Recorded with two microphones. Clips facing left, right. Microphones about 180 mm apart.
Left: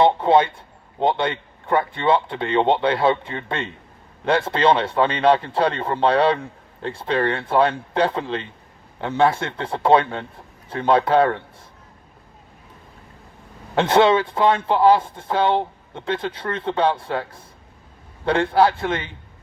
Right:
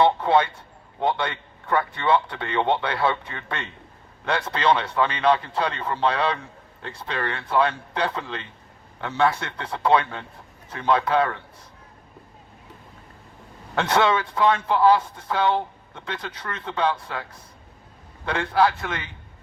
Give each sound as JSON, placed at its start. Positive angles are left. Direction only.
{"t": 0.0, "sound": "a man's voice", "side_deg": 25}
{"t": 13.9, "sound": "a man's voice", "side_deg": 25}
{"t": 18.3, "sound": "speech", "side_deg": 30}